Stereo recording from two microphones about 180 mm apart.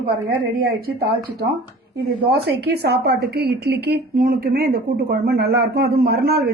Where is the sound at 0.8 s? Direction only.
60° right (ahead or behind).